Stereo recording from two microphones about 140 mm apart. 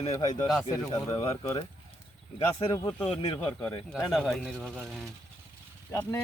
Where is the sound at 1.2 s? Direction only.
45° left (ahead or behind).